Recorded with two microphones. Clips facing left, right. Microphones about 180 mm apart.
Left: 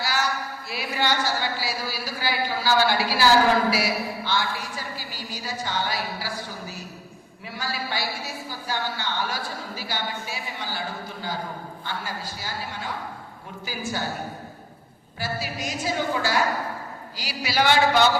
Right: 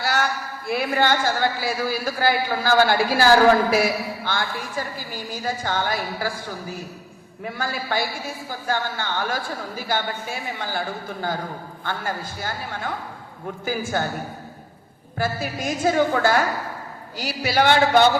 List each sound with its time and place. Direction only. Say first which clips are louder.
0.0 s a sound: right 4 dB; 55° right (ahead or behind)
0.7 s a man's voice: right 6 dB; 50° right (ahead or behind)
15.2 s a man's voice: right 5 dB; 50° right (ahead or behind)